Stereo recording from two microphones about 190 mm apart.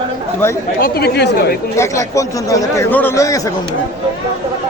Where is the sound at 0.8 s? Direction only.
55° left (ahead or behind).